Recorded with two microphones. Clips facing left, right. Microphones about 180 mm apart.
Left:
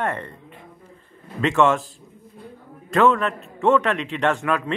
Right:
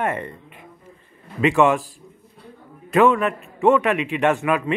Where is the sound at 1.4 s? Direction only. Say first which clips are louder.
Right 2 dB; 15° right (ahead or behind).